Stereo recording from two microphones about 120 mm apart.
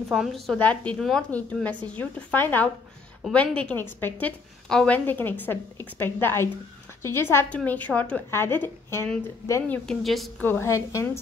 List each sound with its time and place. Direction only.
0.1 s a woman's voice: centre (ahead or behind)
0.6 s a woman's voice: 10° left (ahead or behind)
0.9 s a woman's voice: centre (ahead or behind)
1.3 s a woman's voice: 10° left (ahead or behind)
10.4 s a woman's voice: 20° left (ahead or behind)